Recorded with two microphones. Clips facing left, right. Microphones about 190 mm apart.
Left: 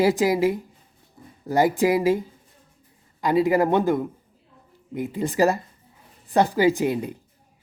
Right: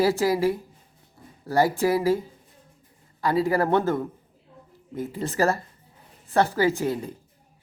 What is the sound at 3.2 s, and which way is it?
Speech, 15° left (ahead or behind).